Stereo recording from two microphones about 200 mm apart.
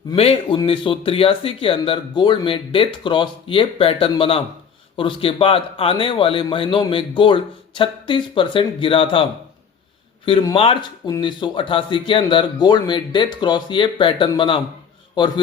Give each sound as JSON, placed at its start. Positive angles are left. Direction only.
{"t": 0.1, "sound": "speech", "side_deg": 25}
{"t": 10.2, "sound": "speech", "side_deg": 25}